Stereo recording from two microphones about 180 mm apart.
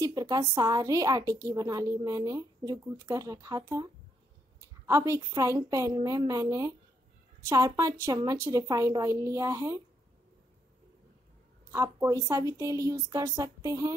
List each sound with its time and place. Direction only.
0.0 s a woman's voice: 20° right (ahead or behind)
11.7 s speech: 20° right (ahead or behind)